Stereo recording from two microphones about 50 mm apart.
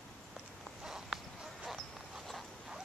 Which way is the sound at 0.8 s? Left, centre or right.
Centre.